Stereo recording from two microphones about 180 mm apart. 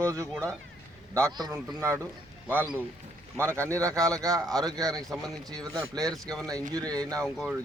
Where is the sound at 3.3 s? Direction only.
15° right (ahead or behind).